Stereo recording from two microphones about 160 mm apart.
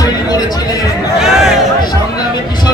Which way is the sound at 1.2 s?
5° right (ahead or behind).